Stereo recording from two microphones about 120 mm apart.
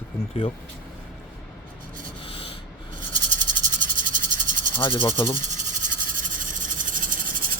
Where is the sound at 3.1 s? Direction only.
90° right.